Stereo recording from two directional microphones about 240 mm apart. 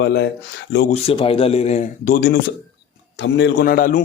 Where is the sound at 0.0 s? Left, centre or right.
Left.